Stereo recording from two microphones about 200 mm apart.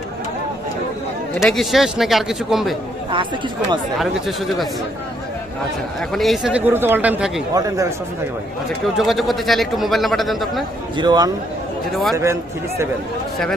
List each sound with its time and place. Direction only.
1.4 s speech: centre (ahead or behind)
3.9 s speech: centre (ahead or behind)
6.0 s speech: centre (ahead or behind)
7.5 s speech: 15° right (ahead or behind)
9.0 s speech: centre (ahead or behind)
10.9 s a man's voice: 20° right (ahead or behind)